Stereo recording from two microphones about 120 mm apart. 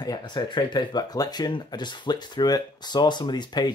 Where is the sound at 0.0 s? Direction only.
35° left (ahead or behind).